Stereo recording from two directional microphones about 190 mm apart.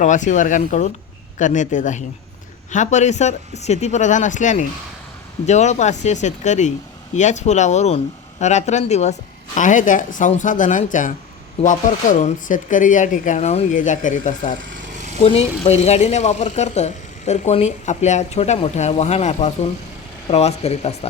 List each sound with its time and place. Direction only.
0.0 s speech: 40° left (ahead or behind)
14.6 s a sound: 40° right (ahead or behind)
15.2 s speech: 35° left (ahead or behind)